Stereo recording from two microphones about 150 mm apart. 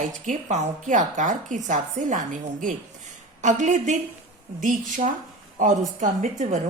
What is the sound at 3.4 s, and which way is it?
A woman's voice, 55° right (ahead or behind).